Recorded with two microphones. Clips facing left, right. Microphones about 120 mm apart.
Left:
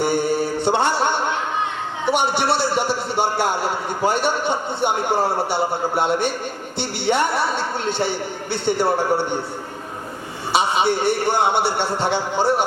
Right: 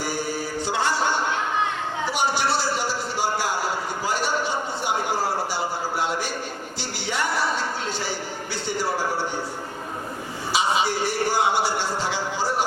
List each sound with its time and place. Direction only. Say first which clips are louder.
0.0 s mantra: left 8 dB; 60° left (ahead or behind)
2.0 s a man's voice: left 5 dB; 60° left (ahead or behind)
10.5 s a man's voice: left 4 dB; 60° left (ahead or behind)